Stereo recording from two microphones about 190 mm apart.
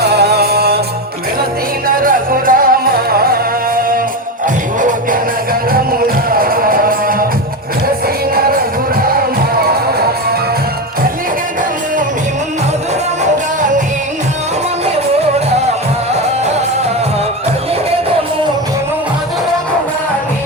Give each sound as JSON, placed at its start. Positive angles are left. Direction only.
{"t": 0.0, "sound": "music", "side_deg": -60}
{"t": 2.0, "sound": "music", "side_deg": -45}
{"t": 6.3, "sound": "music", "side_deg": -50}